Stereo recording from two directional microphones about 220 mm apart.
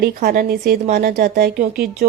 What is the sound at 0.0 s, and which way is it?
A woman's voice, 40° right (ahead or behind).